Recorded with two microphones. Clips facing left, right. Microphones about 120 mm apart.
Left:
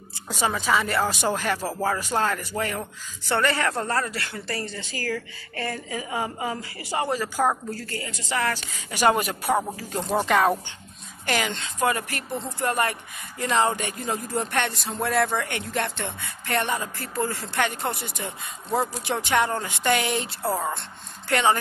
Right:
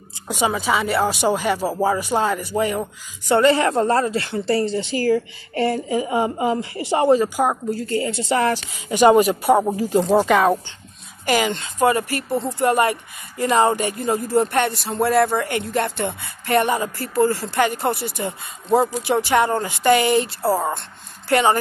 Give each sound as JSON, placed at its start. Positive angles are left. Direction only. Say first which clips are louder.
{"t": 0.3, "sound": "a man's voice", "louder": "right 3 dB", "side_deg": -10}
{"t": 9.1, "sound": "speech", "louder": "right 9 dB", "side_deg": -5}
{"t": 9.9, "sound": "speech", "louder": "right 9 dB", "side_deg": -35}
{"t": 10.2, "sound": "speech", "louder": "right 4 dB", "side_deg": 0}